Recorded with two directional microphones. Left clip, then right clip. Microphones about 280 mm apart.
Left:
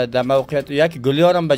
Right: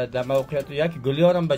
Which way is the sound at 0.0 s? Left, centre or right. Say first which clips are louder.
Left 6 dB; left.